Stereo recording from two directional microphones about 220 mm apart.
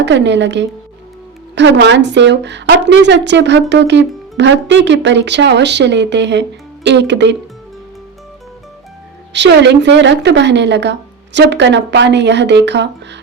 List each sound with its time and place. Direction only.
0.0 s a woman's voice: 55° right (ahead or behind)
9.3 s a woman's voice: 50° right (ahead or behind)